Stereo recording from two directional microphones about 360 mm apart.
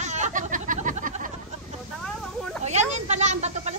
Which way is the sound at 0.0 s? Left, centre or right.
Centre.